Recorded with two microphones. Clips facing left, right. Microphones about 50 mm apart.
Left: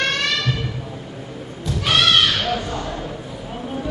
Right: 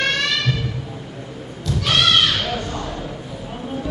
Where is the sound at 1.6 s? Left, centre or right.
Centre.